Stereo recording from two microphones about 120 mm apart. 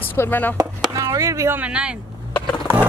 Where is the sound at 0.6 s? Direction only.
30° right (ahead or behind).